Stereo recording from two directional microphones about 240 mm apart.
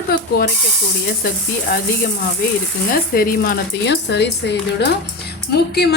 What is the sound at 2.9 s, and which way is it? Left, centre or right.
Speech, left.